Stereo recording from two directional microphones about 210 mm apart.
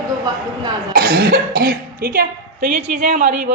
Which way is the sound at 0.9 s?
45° right (ahead or behind).